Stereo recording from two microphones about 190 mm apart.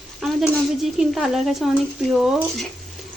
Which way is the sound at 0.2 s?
Centre (ahead or behind).